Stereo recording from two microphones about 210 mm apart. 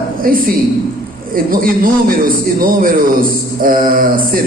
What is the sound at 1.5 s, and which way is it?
A man's voice, 45° right (ahead or behind).